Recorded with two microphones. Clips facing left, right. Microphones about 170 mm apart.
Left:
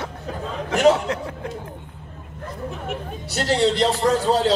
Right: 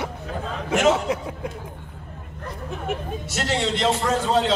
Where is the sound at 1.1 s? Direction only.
10° right (ahead or behind).